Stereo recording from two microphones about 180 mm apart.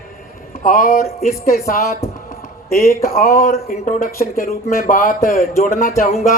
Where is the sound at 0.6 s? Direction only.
50° left (ahead or behind).